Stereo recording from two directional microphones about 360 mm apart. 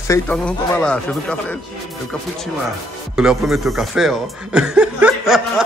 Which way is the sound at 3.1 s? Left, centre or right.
Centre.